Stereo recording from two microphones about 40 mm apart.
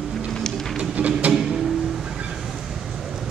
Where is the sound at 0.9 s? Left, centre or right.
Right.